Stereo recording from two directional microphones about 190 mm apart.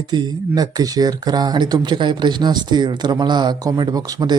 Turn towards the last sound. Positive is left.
turn(degrees=-20)  # may be behind; listen again after turning